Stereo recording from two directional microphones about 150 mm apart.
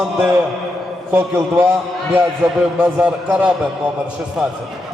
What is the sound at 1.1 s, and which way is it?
Speech, 10° right (ahead or behind).